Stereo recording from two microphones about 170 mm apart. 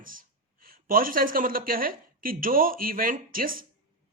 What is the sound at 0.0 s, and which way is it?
Speech, 55° right (ahead or behind).